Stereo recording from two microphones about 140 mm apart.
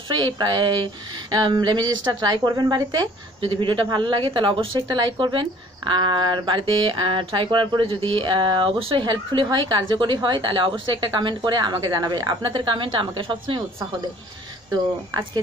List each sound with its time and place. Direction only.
0.1 s speech: 30° right (ahead or behind)
14.7 s speech: 25° right (ahead or behind)